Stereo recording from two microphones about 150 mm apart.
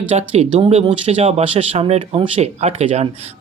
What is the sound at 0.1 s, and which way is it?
Speech, 45° right (ahead or behind).